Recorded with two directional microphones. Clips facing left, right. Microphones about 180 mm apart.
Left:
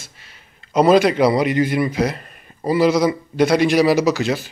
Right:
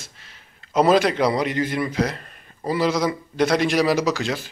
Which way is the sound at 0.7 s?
5° left (ahead or behind).